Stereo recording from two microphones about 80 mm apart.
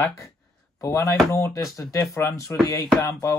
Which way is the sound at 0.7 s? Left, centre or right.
Left.